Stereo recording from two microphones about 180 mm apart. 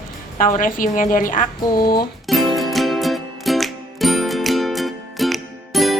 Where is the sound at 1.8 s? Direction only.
55° left (ahead or behind).